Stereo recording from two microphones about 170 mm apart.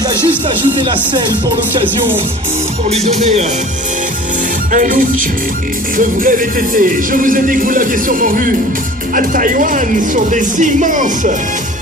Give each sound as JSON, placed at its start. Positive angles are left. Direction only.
{"t": 2.9, "sound": "music", "side_deg": -40}
{"t": 4.7, "sound": "speech", "side_deg": -50}